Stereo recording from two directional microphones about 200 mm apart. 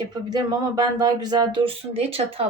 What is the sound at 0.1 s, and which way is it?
Speech, 20° right (ahead or behind).